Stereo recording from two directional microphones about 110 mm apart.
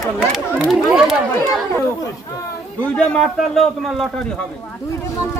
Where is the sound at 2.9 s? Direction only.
5° left (ahead or behind).